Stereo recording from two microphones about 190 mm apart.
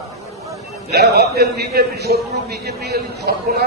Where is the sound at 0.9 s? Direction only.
60° right (ahead or behind).